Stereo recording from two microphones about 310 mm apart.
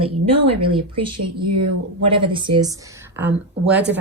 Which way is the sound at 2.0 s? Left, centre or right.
Centre.